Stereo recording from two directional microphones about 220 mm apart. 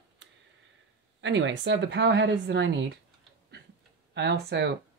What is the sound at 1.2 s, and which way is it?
Speech, 55° right (ahead or behind).